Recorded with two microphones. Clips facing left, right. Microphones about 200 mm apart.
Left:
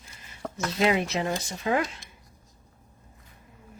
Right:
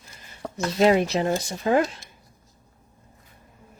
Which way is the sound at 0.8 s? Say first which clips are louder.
Right 6 dB; 40° right (ahead or behind).